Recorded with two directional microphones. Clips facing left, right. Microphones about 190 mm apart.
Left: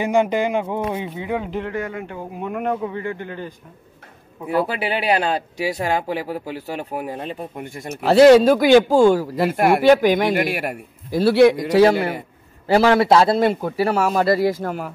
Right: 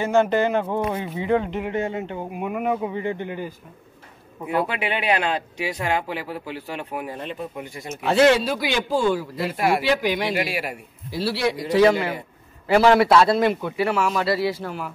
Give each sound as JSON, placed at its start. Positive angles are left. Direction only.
{"t": 0.0, "sound": "speech", "side_deg": 15}
{"t": 1.7, "sound": "speech", "side_deg": -25}
{"t": 2.4, "sound": "speech", "side_deg": -5}
{"t": 4.6, "sound": "speech", "side_deg": 35}
{"t": 7.9, "sound": "a man's voice", "side_deg": 35}
{"t": 12.6, "sound": "speech", "side_deg": 40}